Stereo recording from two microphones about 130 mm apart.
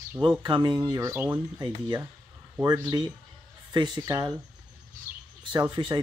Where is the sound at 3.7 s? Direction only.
35° right (ahead or behind).